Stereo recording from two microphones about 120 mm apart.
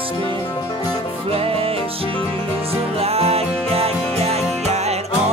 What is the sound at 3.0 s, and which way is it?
Music, 55° right (ahead or behind).